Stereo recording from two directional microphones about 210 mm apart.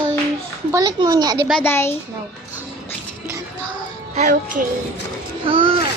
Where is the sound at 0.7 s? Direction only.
15° right (ahead or behind).